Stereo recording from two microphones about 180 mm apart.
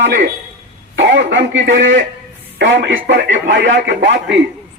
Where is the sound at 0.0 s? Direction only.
80° right.